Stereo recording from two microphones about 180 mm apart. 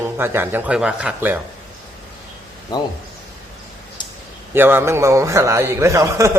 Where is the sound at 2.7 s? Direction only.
25° left (ahead or behind).